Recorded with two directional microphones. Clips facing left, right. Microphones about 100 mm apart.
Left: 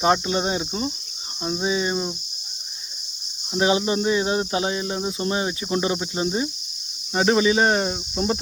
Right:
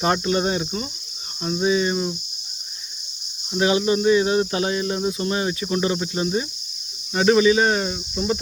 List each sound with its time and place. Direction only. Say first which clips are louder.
0.0 s cricket: even; 15° left (ahead or behind)
3.5 s speech: right 1 dB; 25° left (ahead or behind)